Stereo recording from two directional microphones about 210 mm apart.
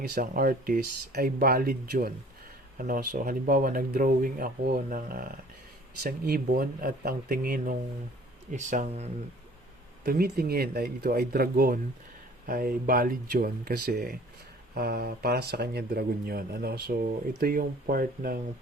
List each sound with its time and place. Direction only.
0.0 s speech: 45° right (ahead or behind)
10.0 s speech: 45° right (ahead or behind)